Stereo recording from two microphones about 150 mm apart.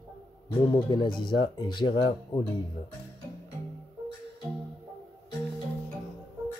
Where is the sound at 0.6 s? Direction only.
30° left (ahead or behind).